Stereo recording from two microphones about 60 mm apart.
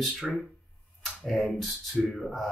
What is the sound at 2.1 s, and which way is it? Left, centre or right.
Speech, centre.